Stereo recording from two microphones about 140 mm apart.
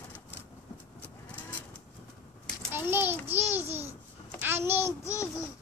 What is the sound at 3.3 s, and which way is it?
Babbling, 15° right (ahead or behind).